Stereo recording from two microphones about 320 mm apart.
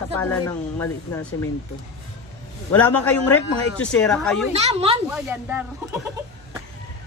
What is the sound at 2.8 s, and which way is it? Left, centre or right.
A man's voice, centre.